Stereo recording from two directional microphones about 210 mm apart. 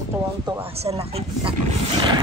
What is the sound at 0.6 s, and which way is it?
Speech, 30° right (ahead or behind).